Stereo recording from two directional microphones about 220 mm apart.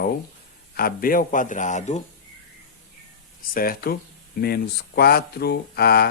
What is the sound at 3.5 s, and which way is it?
A man's voice, 40° left (ahead or behind).